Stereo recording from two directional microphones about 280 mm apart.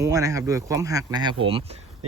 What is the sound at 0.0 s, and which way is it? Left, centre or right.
Speech, centre.